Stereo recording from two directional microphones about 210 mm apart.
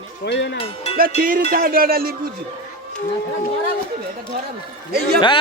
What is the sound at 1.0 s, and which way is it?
Speech, 45° right (ahead or behind).